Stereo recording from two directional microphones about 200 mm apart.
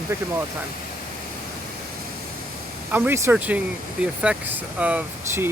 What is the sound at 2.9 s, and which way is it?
Speech, 10° right (ahead or behind).